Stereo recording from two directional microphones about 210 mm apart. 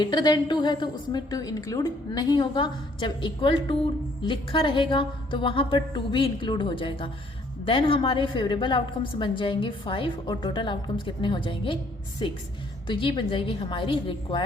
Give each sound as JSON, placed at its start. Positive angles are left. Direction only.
{"t": 0.0, "sound": "a woman's voice", "side_deg": 20}